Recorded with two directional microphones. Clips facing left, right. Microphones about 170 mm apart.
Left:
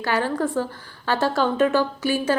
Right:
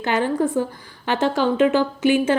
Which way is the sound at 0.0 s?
20° right (ahead or behind).